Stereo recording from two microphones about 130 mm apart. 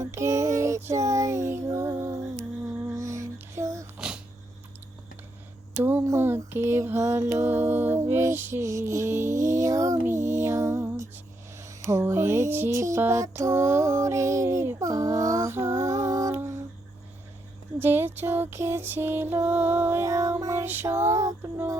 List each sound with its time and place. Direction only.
0.0 s child singing: 25° right (ahead or behind)
2.9 s music: 25° right (ahead or behind)
3.9 s a sound: 5° right (ahead or behind)
5.7 s a sound: 15° right (ahead or behind)
6.1 s mantra: 15° right (ahead or behind)
11.8 s music: 25° right (ahead or behind)
17.7 s mantra: 15° right (ahead or behind)